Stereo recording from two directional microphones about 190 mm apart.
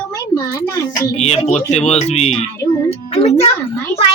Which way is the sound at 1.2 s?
35° left (ahead or behind).